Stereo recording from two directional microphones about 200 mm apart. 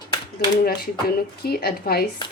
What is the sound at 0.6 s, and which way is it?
Speech, 50° left (ahead or behind).